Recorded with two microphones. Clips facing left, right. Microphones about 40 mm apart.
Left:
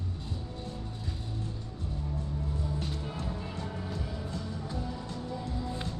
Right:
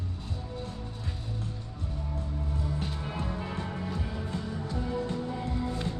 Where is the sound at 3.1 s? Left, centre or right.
Right.